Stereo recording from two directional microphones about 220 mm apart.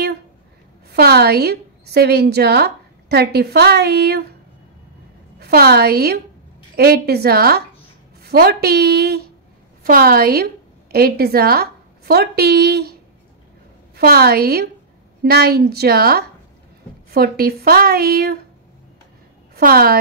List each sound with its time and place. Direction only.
0.8 s a woman's voice: 45° right (ahead or behind)
5.4 s a woman's voice: 45° right (ahead or behind)
13.9 s speech: 45° right (ahead or behind)
19.5 s a woman's voice: 45° right (ahead or behind)